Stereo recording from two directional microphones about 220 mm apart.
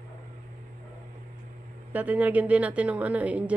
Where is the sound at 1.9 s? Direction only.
5° right (ahead or behind).